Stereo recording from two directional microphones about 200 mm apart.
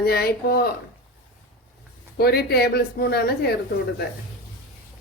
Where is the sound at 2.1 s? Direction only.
50° left (ahead or behind).